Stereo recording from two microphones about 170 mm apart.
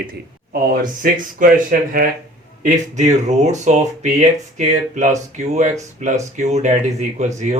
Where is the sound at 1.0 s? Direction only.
55° right (ahead or behind).